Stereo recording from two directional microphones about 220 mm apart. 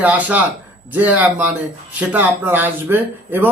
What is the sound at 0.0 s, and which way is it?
Speech, 5° right (ahead or behind).